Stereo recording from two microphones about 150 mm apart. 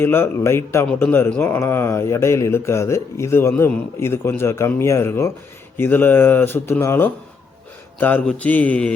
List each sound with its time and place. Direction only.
0.0 s speech: 15° left (ahead or behind)